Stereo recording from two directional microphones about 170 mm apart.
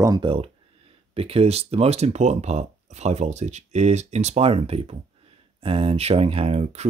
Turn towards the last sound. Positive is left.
turn(degrees=-40)  # may be behind; listen again after turning